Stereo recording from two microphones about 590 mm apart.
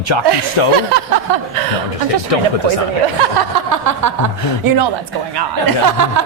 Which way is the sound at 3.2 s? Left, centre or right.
Right.